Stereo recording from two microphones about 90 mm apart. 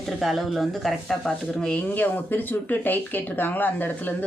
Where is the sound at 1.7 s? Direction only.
20° left (ahead or behind).